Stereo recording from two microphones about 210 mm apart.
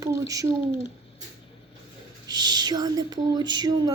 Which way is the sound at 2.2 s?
20° right (ahead or behind).